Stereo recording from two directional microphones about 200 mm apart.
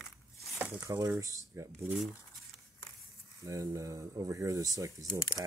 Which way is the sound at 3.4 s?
15° right (ahead or behind).